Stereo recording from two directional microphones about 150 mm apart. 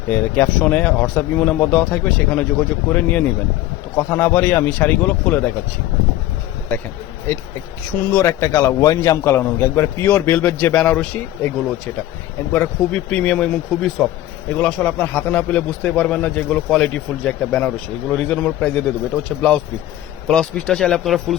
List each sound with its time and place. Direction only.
0.1 s a man's voice: 5° left (ahead or behind)
7.9 s a man's voice: 15° left (ahead or behind)
12.5 s a man's voice: 5° left (ahead or behind)